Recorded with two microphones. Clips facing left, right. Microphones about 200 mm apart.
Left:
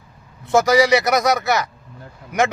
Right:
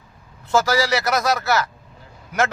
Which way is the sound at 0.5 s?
20° left (ahead or behind).